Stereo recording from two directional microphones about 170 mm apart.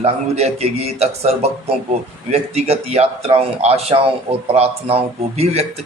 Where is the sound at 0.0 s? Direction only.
40° right (ahead or behind).